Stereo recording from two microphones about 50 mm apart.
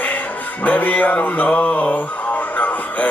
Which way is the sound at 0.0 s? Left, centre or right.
Left.